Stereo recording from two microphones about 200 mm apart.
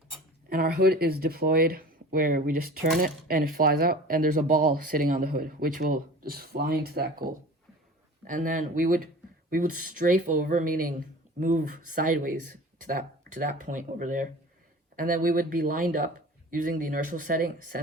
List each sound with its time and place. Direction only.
0.5 s speech: 50° right (ahead or behind)